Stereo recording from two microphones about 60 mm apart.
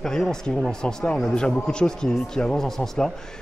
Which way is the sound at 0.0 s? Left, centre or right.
Centre.